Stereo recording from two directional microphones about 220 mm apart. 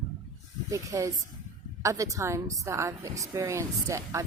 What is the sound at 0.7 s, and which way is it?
A woman's voice, 15° right (ahead or behind).